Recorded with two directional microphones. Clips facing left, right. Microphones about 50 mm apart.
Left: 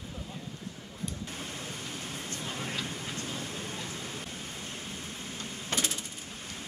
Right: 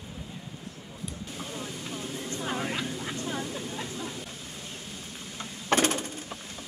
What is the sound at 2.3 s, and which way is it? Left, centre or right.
Vehicle, right.